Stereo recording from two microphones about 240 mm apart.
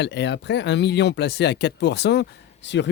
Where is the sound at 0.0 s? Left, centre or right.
Left.